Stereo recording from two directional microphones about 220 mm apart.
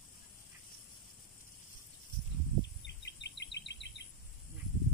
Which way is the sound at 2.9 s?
55° left (ahead or behind).